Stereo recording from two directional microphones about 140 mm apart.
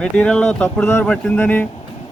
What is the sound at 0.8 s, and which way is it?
Speech, 15° left (ahead or behind).